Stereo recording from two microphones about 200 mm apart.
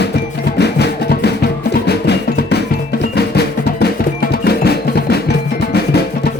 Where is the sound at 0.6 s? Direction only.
55° left (ahead or behind).